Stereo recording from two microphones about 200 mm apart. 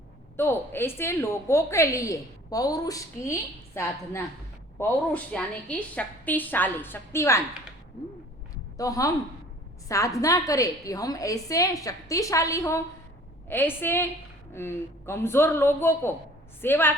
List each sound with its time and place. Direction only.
0.3 s a woman's voice: 10° left (ahead or behind)
8.8 s a woman's voice: 15° left (ahead or behind)